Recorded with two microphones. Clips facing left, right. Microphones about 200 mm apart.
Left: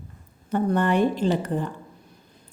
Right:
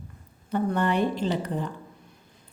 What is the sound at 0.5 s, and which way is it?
Speech, 50° left (ahead or behind).